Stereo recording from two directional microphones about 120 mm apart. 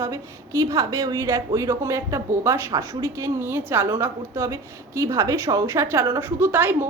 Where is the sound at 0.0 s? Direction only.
25° right (ahead or behind).